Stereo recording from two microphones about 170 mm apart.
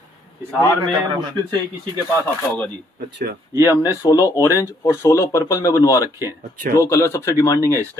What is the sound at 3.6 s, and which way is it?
Speech, 20° left (ahead or behind).